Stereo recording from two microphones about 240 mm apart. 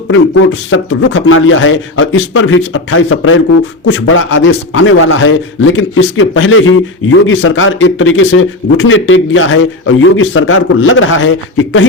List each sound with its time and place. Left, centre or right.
0.1 s a man's voice: left